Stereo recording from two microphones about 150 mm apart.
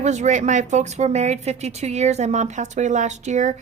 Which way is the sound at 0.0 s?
50° right (ahead or behind).